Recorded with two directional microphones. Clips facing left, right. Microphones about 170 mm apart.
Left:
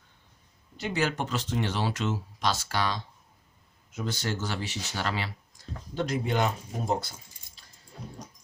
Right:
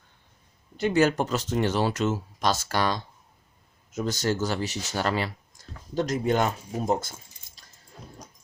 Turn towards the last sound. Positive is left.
turn(degrees=-45)  # may be behind; listen again after turning